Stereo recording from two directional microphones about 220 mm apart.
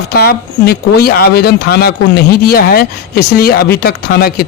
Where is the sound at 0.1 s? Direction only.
45° left (ahead or behind).